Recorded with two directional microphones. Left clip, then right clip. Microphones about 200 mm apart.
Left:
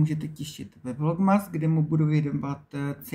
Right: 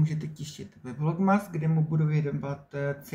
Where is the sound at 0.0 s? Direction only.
Centre (ahead or behind).